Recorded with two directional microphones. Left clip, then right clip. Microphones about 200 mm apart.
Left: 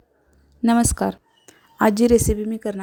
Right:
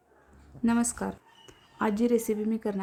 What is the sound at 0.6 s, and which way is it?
A woman's voice, 40° left (ahead or behind).